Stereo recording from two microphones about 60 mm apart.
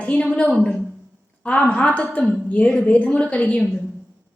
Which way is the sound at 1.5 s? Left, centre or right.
Left.